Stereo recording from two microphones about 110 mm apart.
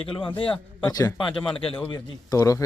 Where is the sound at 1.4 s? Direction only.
55° left (ahead or behind).